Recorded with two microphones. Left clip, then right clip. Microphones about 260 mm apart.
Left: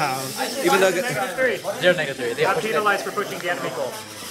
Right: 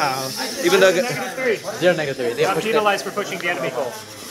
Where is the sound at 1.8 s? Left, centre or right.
Right.